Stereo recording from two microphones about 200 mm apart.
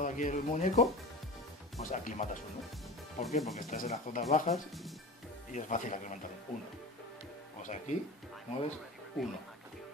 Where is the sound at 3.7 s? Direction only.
40° left (ahead or behind).